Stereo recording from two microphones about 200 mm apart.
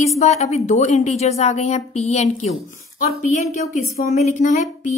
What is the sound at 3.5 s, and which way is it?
A woman's voice, 35° left (ahead or behind).